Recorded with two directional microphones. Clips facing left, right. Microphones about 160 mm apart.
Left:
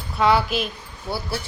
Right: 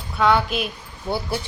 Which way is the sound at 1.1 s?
15° right (ahead or behind).